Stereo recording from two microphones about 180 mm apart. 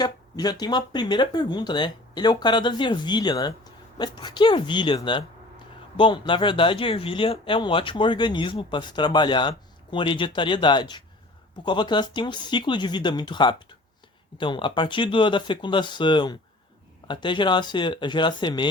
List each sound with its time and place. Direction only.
0.0 s speech: 20° left (ahead or behind)